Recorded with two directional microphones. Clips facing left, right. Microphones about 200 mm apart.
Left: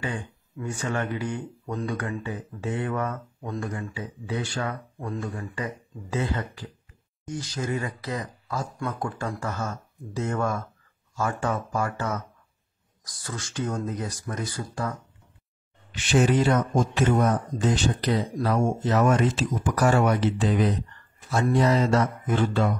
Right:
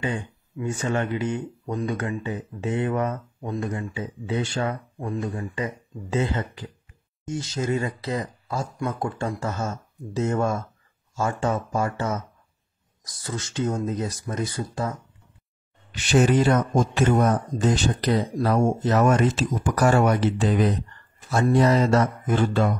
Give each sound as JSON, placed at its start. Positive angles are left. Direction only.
{"t": 0.0, "sound": "speech", "side_deg": -25}
{"t": 15.9, "sound": "speech", "side_deg": -40}
{"t": 21.5, "sound": "speech", "side_deg": -45}